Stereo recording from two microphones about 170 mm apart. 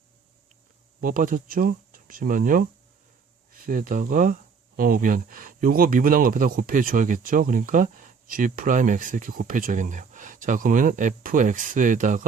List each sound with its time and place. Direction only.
1.0 s speech: 55° right (ahead or behind)